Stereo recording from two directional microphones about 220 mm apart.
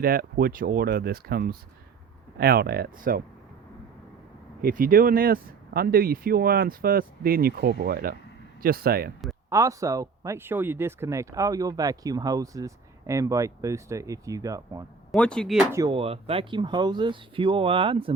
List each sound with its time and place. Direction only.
0.0 s speech: 40° right (ahead or behind)
4.6 s speech: 40° right (ahead or behind)
9.5 s speech: 15° right (ahead or behind)
15.1 s speech: 5° left (ahead or behind)
15.7 s speech: 20° right (ahead or behind)